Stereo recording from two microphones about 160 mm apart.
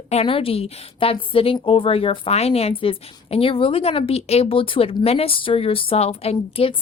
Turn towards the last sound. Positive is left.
turn(degrees=35)  # may be behind; listen again after turning